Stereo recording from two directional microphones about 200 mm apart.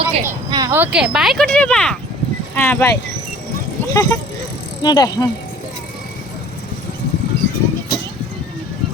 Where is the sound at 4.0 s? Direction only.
15° left (ahead or behind).